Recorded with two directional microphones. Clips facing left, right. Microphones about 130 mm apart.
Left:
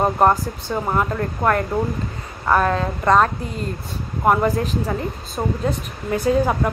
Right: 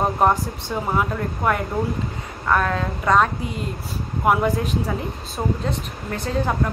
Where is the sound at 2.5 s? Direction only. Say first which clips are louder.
Left 2 dB; 30° left (ahead or behind).